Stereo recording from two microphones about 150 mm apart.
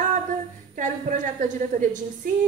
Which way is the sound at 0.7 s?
60° right (ahead or behind).